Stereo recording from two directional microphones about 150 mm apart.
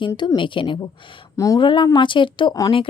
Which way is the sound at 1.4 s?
20° left (ahead or behind).